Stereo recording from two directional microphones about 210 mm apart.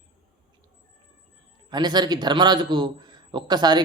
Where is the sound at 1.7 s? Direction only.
20° right (ahead or behind).